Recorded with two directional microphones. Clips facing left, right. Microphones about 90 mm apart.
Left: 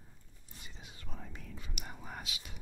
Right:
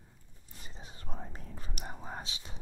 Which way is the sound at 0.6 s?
35° right (ahead or behind).